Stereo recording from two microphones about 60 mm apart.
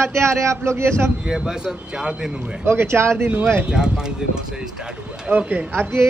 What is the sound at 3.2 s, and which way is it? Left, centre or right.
Speech, right.